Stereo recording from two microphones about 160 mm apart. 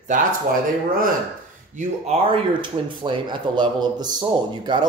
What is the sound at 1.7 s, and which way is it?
Speech, 45° right (ahead or behind).